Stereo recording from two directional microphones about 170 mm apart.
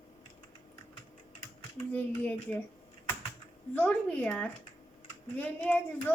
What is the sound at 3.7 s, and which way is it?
Speech, 10° left (ahead or behind).